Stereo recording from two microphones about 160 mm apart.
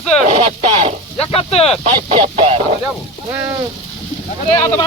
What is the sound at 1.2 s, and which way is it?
Speech, 40° left (ahead or behind).